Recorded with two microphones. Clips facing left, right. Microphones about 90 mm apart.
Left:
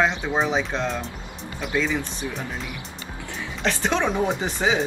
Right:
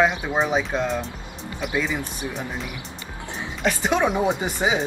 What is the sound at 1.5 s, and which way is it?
Speech, 15° right (ahead or behind).